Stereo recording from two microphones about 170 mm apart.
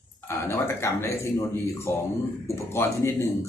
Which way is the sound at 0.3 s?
15° left (ahead or behind).